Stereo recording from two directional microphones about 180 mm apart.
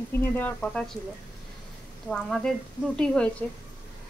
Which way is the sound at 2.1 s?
5° left (ahead or behind).